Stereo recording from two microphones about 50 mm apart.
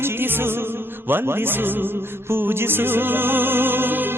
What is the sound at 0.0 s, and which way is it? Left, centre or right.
Music, right.